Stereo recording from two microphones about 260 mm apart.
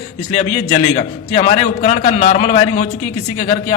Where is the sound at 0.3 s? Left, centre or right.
Left.